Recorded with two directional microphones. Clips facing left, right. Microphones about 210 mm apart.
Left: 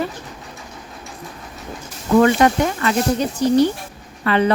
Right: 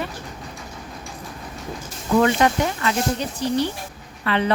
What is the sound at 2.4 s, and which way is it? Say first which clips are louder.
Speech: left 4 dB; 45° left (ahead or behind).